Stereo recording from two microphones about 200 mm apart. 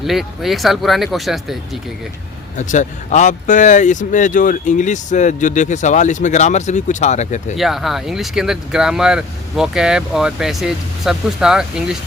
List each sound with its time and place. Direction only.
0.1 s speech: centre (ahead or behind)
2.6 s speech: 35° left (ahead or behind)
7.5 s speech: centre (ahead or behind)